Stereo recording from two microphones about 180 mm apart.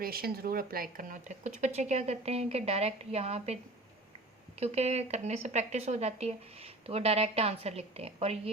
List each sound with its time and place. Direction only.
0.0 s speech: 55° right (ahead or behind); by 3.6 s 35° right (ahead or behind)
4.6 s speech: 35° right (ahead or behind)